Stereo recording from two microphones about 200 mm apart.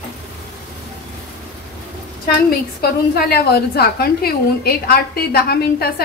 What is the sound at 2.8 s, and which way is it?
A woman's voice, 50° left (ahead or behind).